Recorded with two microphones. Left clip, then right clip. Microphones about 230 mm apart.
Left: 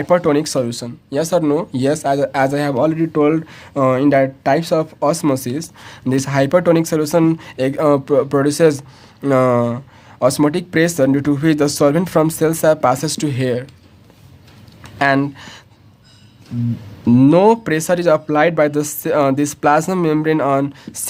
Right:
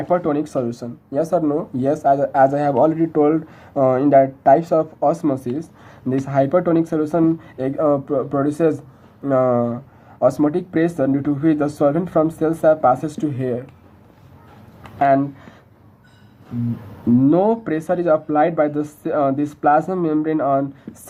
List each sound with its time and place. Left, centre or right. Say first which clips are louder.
0.0 s speech: left 5 dB; left
9.2 s speech: left 3 dB; left
13.3 s speech: left 4 dB; left
14.9 s speech: even; left
17.2 s speech: left 5 dB; left